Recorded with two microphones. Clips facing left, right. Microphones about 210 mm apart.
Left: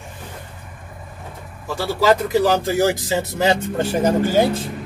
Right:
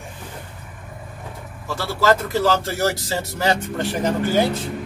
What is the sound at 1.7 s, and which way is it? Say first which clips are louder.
Speech: left 2 dB; 15° left (ahead or behind).